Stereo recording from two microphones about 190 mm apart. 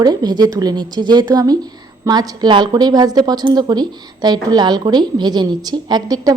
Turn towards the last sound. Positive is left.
turn(degrees=-20)  # may be behind; listen again after turning